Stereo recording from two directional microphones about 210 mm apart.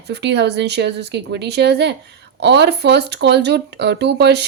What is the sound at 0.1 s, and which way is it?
A woman's voice, 55° right (ahead or behind).